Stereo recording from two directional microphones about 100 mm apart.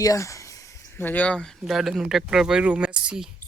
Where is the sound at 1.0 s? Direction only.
15° left (ahead or behind).